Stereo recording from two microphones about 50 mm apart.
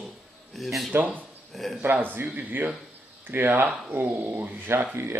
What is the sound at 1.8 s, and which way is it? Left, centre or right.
Speech, right.